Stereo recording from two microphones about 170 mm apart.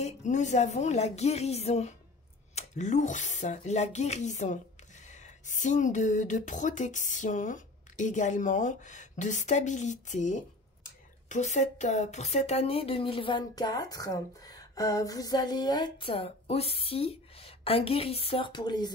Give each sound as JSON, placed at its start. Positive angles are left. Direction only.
{"t": 0.0, "sound": "speech", "side_deg": 45}